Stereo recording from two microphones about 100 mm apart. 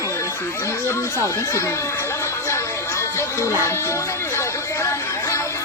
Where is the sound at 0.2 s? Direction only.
25° left (ahead or behind).